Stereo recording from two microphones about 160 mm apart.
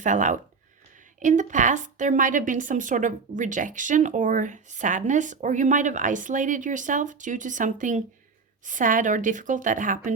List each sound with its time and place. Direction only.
0.0 s a woman's voice: 50° right (ahead or behind)